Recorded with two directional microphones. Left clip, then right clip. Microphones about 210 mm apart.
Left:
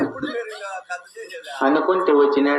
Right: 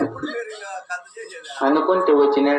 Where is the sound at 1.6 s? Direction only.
35° left (ahead or behind).